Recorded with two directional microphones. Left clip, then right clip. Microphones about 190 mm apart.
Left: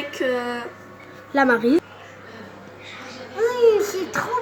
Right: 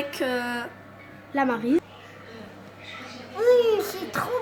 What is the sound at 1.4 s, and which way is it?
Speech, 20° left (ahead or behind).